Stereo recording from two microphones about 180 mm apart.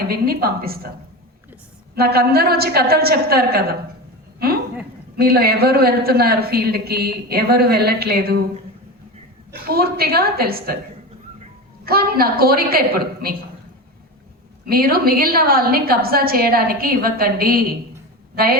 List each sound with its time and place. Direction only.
0.0 s a man's voice: 60° right (ahead or behind)
2.0 s a man's voice: 60° right (ahead or behind)
4.4 s a sound: 60° right (ahead or behind)
5.1 s a man's voice: 55° right (ahead or behind)
9.5 s a man's voice: 55° right (ahead or behind)
11.9 s a man's voice: 55° right (ahead or behind)
14.7 s a man's voice: 55° right (ahead or behind)